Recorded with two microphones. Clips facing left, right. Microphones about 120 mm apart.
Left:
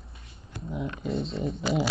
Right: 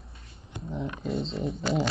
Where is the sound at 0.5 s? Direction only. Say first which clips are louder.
Even; 20° right (ahead or behind).